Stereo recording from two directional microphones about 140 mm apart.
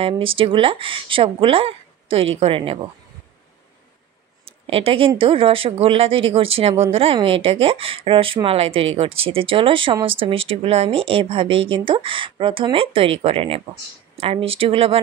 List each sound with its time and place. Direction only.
0.0 s speech: 40° right (ahead or behind)
4.5 s speech: 40° right (ahead or behind)